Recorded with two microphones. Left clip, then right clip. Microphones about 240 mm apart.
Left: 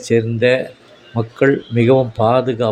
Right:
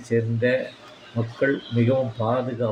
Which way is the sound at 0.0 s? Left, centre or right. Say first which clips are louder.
Left 8 dB; left.